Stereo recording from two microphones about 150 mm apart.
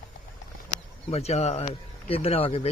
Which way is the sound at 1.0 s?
45° left (ahead or behind).